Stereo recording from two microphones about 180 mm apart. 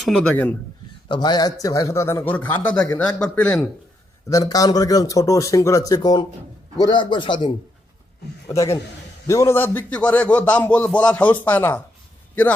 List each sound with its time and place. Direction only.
0.0 s a man's voice: 5° left (ahead or behind)
1.0 s speech: 25° left (ahead or behind); by 3.7 s 5° left (ahead or behind)
4.3 s a man's voice: 20° left (ahead or behind)
8.4 s a man's voice: 20° left (ahead or behind)